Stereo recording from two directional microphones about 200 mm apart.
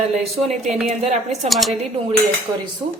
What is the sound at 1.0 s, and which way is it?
Speech, 35° right (ahead or behind).